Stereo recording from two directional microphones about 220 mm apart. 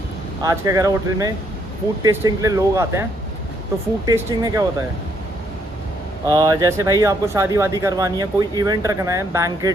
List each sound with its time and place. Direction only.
0.4 s speech: 15° right (ahead or behind)
6.2 s speech: 15° right (ahead or behind)